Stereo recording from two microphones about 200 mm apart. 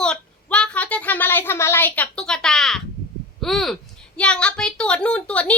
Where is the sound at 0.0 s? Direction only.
5° left (ahead or behind).